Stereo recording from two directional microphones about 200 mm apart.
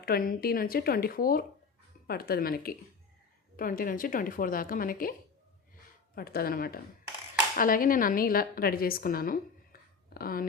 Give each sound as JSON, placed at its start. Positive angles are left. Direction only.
{"t": 0.0, "sound": "speech", "side_deg": 45}
{"t": 6.1, "sound": "speech", "side_deg": 50}